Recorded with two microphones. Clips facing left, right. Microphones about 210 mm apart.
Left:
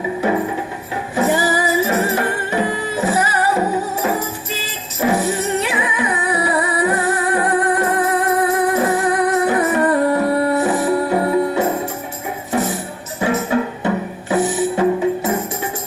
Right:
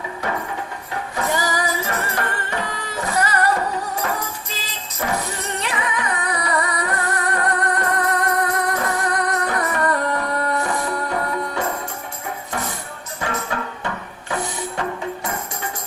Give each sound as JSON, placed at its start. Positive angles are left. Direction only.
{"t": 0.2, "sound": "music", "side_deg": 15}
{"t": 4.0, "sound": "music", "side_deg": 20}
{"t": 5.5, "sound": "music", "side_deg": 10}
{"t": 8.7, "sound": "music", "side_deg": 25}
{"t": 9.0, "sound": "music", "side_deg": 5}
{"t": 9.6, "sound": "music", "side_deg": 25}
{"t": 10.3, "sound": "music", "side_deg": 10}
{"t": 10.8, "sound": "music", "side_deg": 30}
{"t": 13.3, "sound": "music", "side_deg": 20}
{"t": 14.3, "sound": "music", "side_deg": 5}